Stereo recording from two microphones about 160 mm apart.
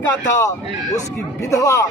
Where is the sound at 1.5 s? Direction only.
20° left (ahead or behind).